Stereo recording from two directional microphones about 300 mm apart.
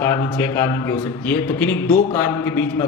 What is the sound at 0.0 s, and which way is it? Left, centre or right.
A man's voice, centre.